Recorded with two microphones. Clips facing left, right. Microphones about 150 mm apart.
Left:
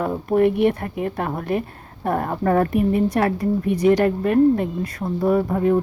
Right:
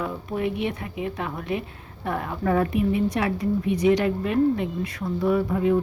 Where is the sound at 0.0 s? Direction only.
50° left (ahead or behind).